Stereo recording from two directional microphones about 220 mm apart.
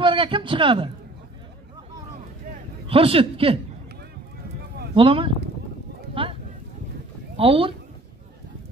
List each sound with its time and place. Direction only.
0.0 s speech: 25° right (ahead or behind)
2.9 s speech: 25° right (ahead or behind)
4.9 s speech: 25° right (ahead or behind)
6.2 s a sound: 25° right (ahead or behind)
7.3 s speech: 25° right (ahead or behind)